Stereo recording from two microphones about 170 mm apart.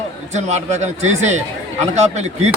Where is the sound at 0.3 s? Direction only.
40° right (ahead or behind).